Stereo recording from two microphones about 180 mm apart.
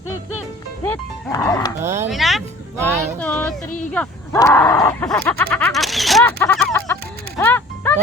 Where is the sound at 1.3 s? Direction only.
15° left (ahead or behind).